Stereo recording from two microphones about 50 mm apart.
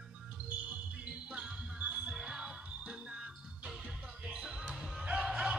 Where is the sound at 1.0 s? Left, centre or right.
Centre.